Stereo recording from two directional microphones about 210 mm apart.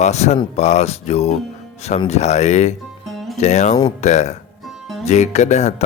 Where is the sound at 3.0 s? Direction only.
Centre (ahead or behind).